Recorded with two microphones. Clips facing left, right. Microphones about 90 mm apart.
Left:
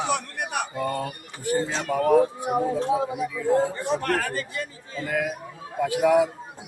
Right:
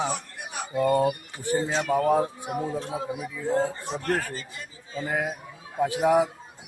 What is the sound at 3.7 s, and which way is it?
A man's voice, 60° left (ahead or behind).